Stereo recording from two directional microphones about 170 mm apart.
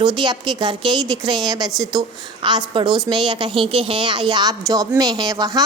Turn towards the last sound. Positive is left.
turn(degrees=-20)  # may be behind; listen again after turning